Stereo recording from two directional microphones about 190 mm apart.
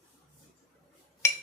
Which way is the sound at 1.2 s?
15° left (ahead or behind).